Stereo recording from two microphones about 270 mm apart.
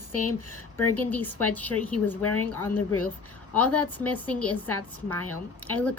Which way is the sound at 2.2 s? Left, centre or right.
Left.